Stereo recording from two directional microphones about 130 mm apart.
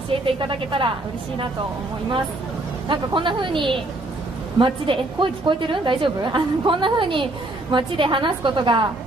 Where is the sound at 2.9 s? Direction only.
40° right (ahead or behind).